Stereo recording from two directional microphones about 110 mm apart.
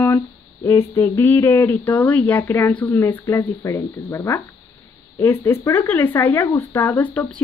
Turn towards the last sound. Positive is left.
turn(degrees=15)  # may be behind; listen again after turning